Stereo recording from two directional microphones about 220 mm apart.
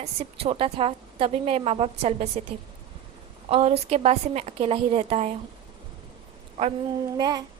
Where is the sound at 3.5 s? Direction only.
25° right (ahead or behind).